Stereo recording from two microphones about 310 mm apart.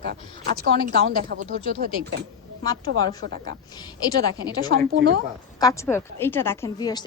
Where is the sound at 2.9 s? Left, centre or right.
Right.